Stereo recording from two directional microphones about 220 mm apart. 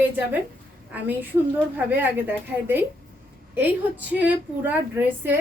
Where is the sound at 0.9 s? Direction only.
10° right (ahead or behind).